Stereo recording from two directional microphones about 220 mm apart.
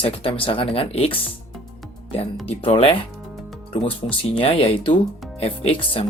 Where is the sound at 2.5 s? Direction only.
25° left (ahead or behind).